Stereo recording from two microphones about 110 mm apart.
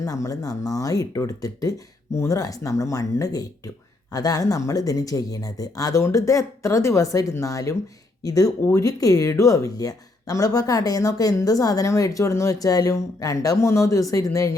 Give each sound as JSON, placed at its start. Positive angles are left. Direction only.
{"t": 0.0, "sound": "speech", "side_deg": 30}